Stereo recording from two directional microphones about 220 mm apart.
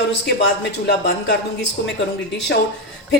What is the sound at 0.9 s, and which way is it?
Speech, 50° left (ahead or behind).